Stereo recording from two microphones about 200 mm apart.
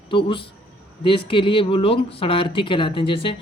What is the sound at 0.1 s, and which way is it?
Speech, 25° left (ahead or behind).